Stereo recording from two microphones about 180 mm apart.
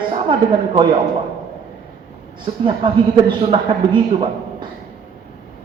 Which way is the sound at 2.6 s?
25° right (ahead or behind).